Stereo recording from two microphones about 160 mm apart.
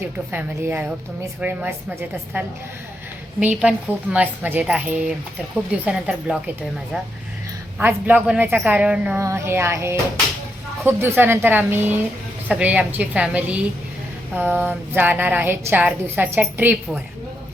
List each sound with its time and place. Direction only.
0.3 s a woman's voice: 10° right (ahead or behind)
3.4 s a woman's voice: 5° right (ahead or behind)
7.8 s a woman's voice: 10° right (ahead or behind)